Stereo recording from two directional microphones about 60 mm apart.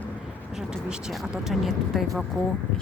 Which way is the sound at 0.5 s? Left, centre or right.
Centre.